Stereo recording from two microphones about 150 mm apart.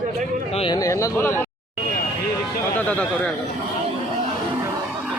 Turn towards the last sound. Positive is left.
turn(degrees=10)  # may be behind; listen again after turning